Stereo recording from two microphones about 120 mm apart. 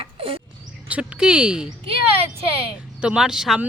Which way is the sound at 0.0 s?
50° right (ahead or behind).